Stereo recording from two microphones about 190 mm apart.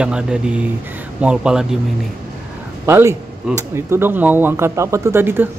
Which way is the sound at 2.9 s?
15° right (ahead or behind).